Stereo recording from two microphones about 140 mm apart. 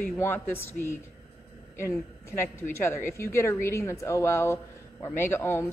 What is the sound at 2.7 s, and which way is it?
A woman's voice, 20° left (ahead or behind).